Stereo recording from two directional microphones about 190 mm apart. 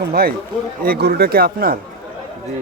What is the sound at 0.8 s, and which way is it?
Speech, 50° right (ahead or behind).